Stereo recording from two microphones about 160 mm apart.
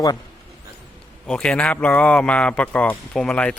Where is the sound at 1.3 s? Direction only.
5° left (ahead or behind).